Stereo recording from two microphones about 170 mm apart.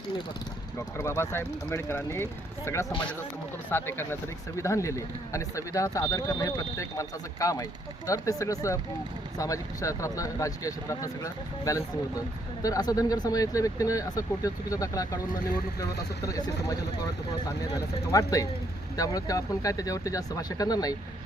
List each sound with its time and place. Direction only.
0.9 s speech: 15° left (ahead or behind)
17.7 s speech: 20° left (ahead or behind)